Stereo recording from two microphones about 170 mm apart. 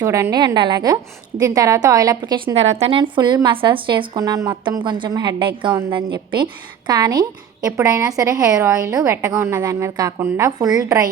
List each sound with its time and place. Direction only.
0.0 s a woman's voice: 20° right (ahead or behind)